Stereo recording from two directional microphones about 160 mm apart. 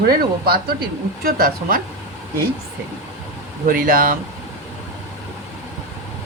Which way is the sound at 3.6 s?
60° right (ahead or behind).